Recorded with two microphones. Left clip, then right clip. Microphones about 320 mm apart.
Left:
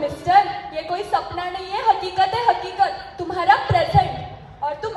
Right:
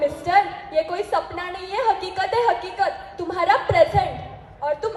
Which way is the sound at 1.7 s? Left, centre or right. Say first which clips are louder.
Left 3 dB; right.